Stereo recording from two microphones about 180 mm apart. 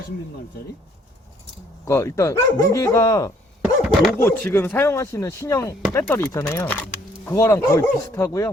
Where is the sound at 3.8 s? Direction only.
Centre (ahead or behind).